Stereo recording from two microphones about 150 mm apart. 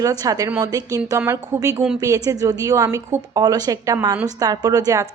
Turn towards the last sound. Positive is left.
turn(degrees=-20)  # may be behind; listen again after turning